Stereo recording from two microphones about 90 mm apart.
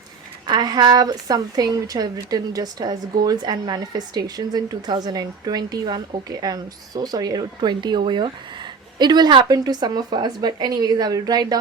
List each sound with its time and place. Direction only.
0.4 s a woman's voice: 50° right (ahead or behind)